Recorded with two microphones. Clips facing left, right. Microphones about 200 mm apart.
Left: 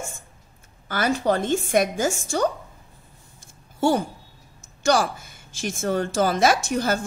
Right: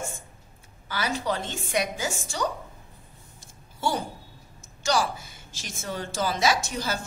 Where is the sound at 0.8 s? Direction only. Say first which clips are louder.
Left 7 dB; 50° left (ahead or behind).